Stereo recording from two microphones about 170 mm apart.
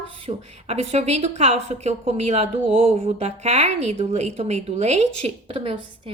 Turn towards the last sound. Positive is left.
turn(degrees=-35)  # may be behind; listen again after turning